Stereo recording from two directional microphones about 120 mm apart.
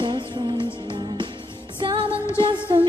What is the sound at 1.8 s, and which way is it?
Music, 45° right (ahead or behind).